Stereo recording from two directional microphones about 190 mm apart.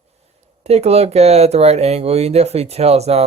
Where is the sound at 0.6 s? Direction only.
35° right (ahead or behind).